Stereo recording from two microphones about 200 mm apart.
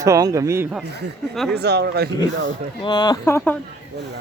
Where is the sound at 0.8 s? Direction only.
55° right (ahead or behind).